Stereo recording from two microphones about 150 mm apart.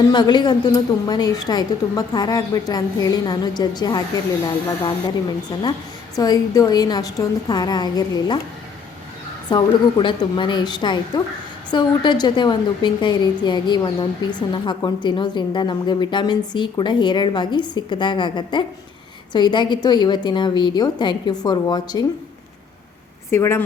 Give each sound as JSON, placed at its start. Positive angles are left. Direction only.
{"t": 0.0, "sound": "a woman's voice", "side_deg": 30}
{"t": 5.5, "sound": "a woman's voice", "side_deg": 25}
{"t": 9.5, "sound": "a woman's voice", "side_deg": 30}
{"t": 23.3, "sound": "a woman's voice", "side_deg": 15}